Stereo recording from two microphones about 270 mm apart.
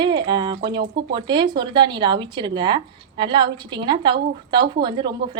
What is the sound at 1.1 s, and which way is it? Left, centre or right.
Speech, centre.